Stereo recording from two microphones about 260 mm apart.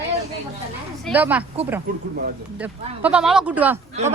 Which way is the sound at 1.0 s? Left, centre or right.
Centre.